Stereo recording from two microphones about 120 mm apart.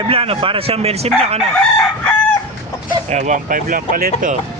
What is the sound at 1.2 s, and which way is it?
Chicken, 60° right (ahead or behind).